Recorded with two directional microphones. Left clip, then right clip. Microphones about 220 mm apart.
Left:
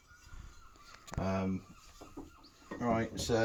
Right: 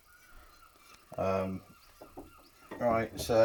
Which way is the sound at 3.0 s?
25° right (ahead or behind).